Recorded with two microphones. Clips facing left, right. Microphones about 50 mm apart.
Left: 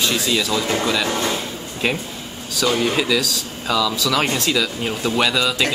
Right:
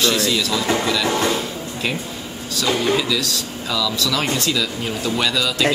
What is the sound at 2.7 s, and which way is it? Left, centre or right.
Speech, left.